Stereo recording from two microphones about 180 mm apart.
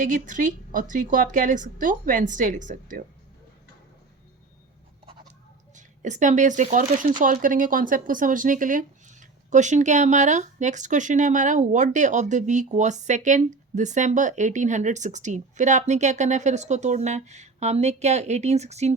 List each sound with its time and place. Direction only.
0.0 s speech: 45° right (ahead or behind)
5.7 s speech: 45° right (ahead or behind)